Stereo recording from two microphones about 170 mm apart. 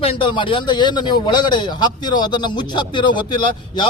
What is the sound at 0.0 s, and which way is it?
A man's voice, 30° left (ahead or behind).